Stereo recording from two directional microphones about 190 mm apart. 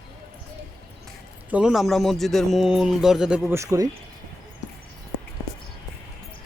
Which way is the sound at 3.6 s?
15° right (ahead or behind).